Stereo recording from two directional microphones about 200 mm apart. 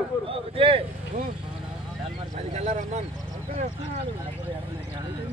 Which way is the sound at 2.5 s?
35° right (ahead or behind).